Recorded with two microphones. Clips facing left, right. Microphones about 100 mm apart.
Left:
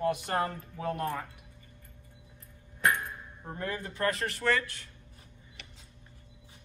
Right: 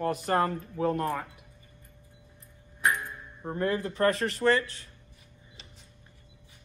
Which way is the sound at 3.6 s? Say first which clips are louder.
Right 7 dB; 35° right (ahead or behind).